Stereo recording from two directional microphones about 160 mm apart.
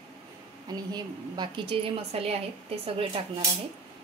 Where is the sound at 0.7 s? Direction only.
25° right (ahead or behind).